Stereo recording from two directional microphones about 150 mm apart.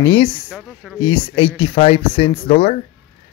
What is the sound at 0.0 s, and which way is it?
Speech, 35° left (ahead or behind).